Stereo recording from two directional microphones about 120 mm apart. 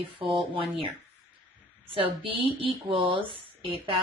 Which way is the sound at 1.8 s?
50° right (ahead or behind).